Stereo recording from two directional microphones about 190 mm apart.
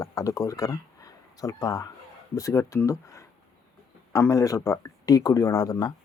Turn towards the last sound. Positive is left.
turn(degrees=20)  # may be behind; listen again after turning